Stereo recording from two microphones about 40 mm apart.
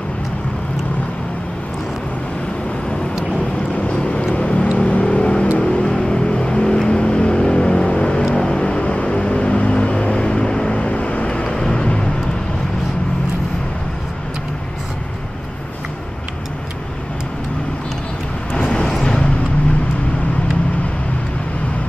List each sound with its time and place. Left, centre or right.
3.9 s vehicle: left